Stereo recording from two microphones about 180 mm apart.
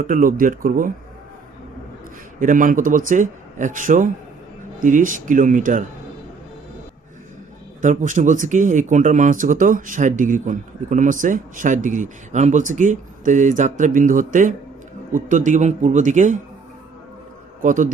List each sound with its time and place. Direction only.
0.0 s speech: 50° right (ahead or behind)
2.4 s speech: 45° right (ahead or behind)
7.8 s speech: 45° right (ahead or behind)
17.6 s speech: 45° right (ahead or behind)